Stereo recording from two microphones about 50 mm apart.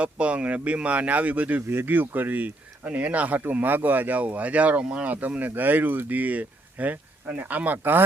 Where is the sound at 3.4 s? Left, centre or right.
Right.